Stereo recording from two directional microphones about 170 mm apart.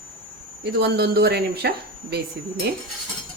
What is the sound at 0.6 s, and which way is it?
Speech, 75° right (ahead or behind).